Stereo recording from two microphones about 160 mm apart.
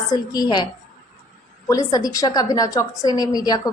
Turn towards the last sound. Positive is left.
turn(degrees=25)  # may be behind; listen again after turning